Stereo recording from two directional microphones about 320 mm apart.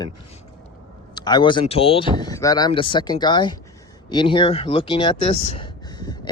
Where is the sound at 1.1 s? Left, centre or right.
Centre.